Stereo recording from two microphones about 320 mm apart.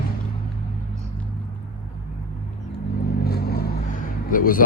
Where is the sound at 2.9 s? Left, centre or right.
Left.